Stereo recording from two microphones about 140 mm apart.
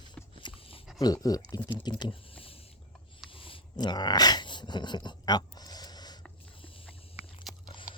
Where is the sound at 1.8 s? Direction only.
30° left (ahead or behind).